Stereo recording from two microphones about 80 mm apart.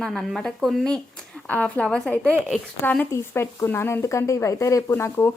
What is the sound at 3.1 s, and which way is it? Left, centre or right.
Speech, left.